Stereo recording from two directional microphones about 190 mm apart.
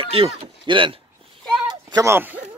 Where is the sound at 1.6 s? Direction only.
15° right (ahead or behind).